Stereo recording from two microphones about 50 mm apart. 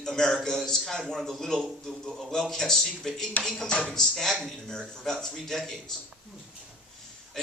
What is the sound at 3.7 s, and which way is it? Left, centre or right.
Speech, centre.